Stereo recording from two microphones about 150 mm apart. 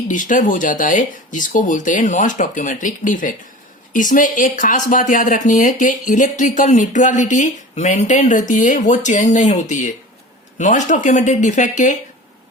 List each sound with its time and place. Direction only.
0.1 s speech: 60° left (ahead or behind)